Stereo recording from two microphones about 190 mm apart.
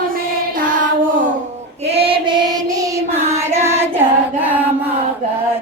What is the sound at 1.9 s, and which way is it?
Female singing, 30° right (ahead or behind).